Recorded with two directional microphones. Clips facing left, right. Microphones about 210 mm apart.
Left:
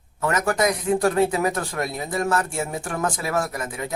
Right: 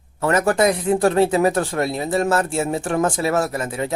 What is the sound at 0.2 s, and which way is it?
Speech, 30° right (ahead or behind).